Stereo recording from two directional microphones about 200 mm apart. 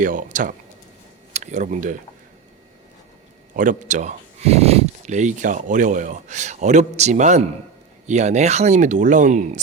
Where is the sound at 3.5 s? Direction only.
40° right (ahead or behind).